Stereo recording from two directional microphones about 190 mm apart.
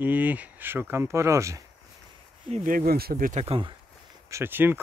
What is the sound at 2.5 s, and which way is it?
Speech, 45° right (ahead or behind).